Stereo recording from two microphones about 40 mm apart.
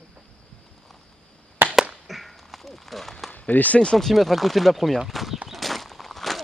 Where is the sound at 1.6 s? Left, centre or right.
Right.